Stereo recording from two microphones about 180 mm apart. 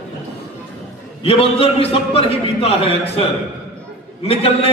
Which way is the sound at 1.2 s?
30° left (ahead or behind).